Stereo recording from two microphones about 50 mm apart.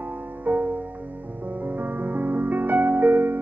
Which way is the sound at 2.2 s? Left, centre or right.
Right.